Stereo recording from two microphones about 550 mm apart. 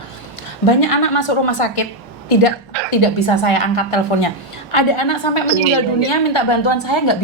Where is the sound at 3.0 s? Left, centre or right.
Left.